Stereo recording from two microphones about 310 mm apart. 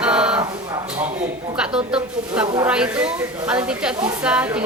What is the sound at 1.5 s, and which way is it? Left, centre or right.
A woman's voice, centre.